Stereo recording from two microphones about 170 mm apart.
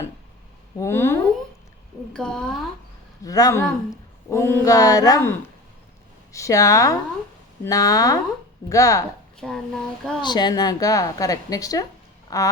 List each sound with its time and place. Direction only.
0.8 s speech: 15° left (ahead or behind)
3.2 s speech: 20° left (ahead or behind)
6.3 s speech: 20° left (ahead or behind)
9.4 s speech: 5° left (ahead or behind)
10.2 s speech: 25° left (ahead or behind)